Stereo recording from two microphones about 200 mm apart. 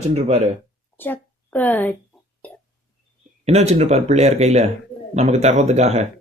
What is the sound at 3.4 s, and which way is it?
A man's voice, 30° right (ahead or behind).